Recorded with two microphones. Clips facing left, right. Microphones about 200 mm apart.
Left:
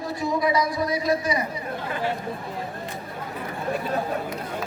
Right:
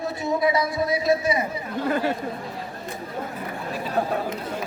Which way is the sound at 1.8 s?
45° right (ahead or behind).